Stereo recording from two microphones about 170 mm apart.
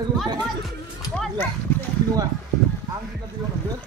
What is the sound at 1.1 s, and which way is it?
Livestock, 5° left (ahead or behind).